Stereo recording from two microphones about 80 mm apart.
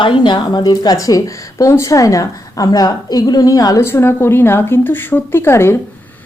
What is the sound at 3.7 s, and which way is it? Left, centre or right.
A woman's voice, left.